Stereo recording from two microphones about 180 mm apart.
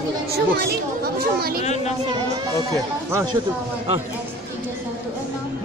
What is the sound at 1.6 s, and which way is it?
Speech, 40° left (ahead or behind).